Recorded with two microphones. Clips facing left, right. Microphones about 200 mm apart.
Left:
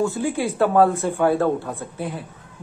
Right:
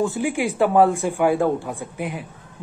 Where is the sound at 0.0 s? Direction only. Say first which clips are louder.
Even; 15° right (ahead or behind).